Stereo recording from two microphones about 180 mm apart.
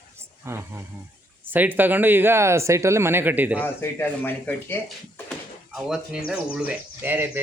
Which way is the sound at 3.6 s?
10° left (ahead or behind).